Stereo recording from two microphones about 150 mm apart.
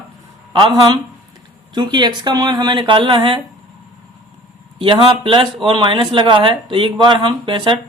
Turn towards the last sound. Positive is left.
turn(degrees=-35)  # may be behind; listen again after turning